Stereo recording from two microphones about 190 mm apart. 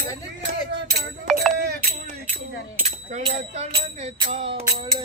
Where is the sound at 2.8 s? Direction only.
35° right (ahead or behind).